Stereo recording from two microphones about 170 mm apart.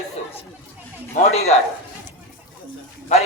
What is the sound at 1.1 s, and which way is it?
Speech, 40° left (ahead or behind).